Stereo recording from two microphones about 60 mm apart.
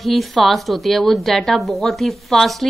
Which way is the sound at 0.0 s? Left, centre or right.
Centre.